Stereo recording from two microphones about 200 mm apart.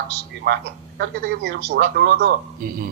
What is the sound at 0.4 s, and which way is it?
A man's voice, 55° right (ahead or behind).